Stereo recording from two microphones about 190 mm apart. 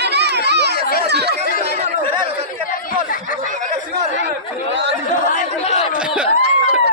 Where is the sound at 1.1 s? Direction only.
60° right (ahead or behind).